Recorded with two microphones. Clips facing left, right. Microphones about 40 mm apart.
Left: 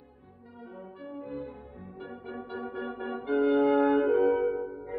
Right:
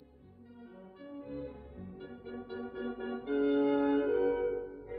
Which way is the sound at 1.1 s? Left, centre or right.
Centre.